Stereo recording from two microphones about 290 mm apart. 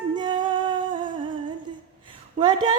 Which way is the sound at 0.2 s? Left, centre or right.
Centre.